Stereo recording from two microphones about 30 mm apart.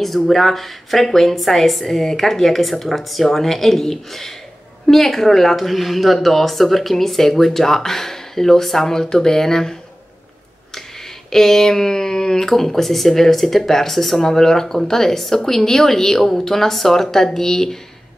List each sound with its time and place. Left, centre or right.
0.0 s speech: centre
11.2 s speech: centre